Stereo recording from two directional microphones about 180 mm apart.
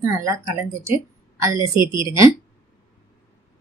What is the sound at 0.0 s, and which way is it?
A woman's voice, 15° right (ahead or behind).